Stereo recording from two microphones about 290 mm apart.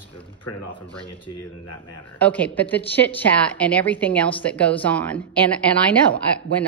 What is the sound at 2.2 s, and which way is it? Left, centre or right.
A woman's voice, centre.